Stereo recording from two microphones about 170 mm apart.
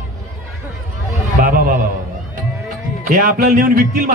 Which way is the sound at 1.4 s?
55° right (ahead or behind).